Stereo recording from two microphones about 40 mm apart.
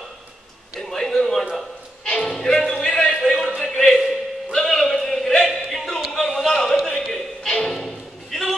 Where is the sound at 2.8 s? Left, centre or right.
Centre.